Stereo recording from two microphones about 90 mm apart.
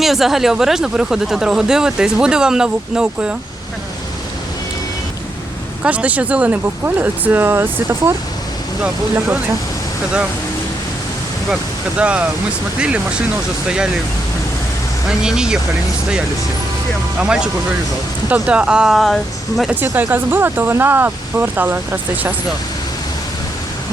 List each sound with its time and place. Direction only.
0.0 s speech: 5° right (ahead or behind)
5.8 s speech: 15° right (ahead or behind)
11.9 s speech: 15° right (ahead or behind)
15.2 s speech: 10° right (ahead or behind)
17.2 s speech: 10° right (ahead or behind)
19.7 s speech: 20° right (ahead or behind)